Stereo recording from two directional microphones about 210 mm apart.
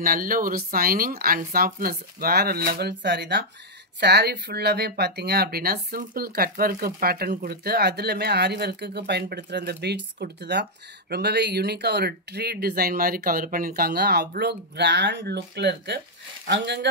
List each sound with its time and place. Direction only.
0.0 s speech: 40° right (ahead or behind)